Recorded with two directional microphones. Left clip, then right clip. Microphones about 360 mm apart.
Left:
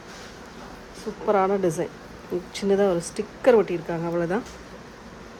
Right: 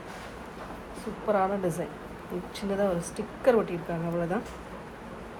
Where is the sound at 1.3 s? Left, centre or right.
Left.